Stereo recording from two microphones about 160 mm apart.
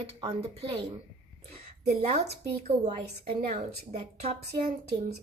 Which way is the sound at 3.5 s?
45° right (ahead or behind).